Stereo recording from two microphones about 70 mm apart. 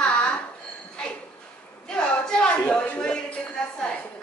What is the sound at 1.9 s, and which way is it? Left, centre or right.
A woman's voice, centre.